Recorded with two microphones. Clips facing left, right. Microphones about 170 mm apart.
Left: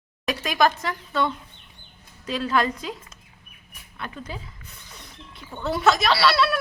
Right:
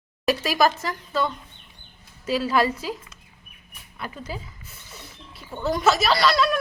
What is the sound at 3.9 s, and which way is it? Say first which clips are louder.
Speech: right 1 dB; 5° right (ahead or behind).